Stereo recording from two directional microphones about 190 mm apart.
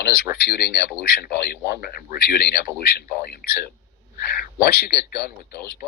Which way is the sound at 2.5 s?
55° left (ahead or behind).